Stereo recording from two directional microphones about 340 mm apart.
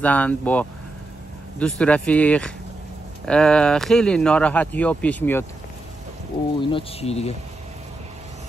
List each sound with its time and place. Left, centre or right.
0.0 s speech: centre
6.7 s speech: centre